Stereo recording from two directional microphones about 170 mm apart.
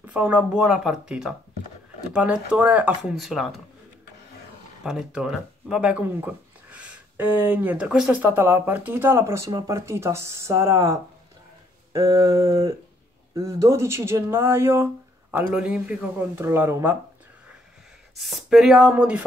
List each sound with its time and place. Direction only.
0.0 s speech: 10° right (ahead or behind)
4.8 s speech: 5° right (ahead or behind)
18.1 s speech: centre (ahead or behind)